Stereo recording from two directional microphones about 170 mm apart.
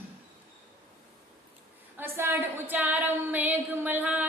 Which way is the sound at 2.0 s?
15° right (ahead or behind).